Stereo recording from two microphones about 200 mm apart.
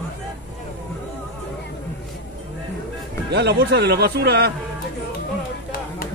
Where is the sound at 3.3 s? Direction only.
55° right (ahead or behind).